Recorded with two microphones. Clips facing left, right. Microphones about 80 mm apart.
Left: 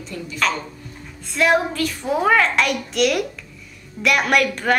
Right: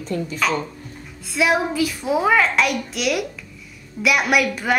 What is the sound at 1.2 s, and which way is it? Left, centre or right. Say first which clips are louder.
A woman's voice: left 1 dB; centre.